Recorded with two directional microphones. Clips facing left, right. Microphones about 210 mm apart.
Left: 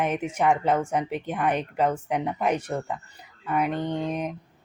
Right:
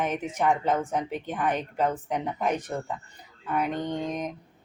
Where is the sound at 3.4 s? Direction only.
10° left (ahead or behind).